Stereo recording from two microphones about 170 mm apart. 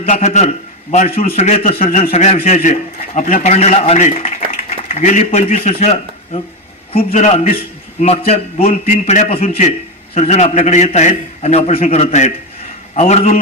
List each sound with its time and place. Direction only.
0.0 s a man's voice: 40° left (ahead or behind)